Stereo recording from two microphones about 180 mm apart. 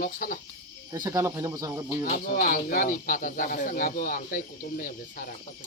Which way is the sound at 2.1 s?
45° left (ahead or behind).